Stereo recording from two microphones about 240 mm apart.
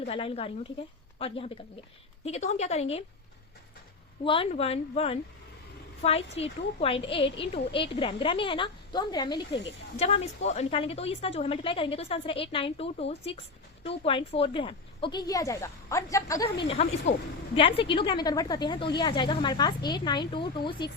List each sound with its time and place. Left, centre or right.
0.0 s a woman's voice: left
4.2 s a woman's voice: left